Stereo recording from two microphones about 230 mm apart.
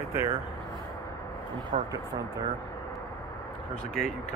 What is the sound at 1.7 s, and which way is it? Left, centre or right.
Speech, right.